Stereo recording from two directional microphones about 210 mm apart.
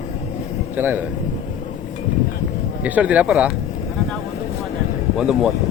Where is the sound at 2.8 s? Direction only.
5° right (ahead or behind).